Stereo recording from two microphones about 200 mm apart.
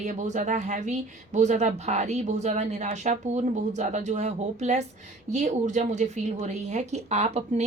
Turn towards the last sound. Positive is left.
turn(degrees=-35)  # may be behind; listen again after turning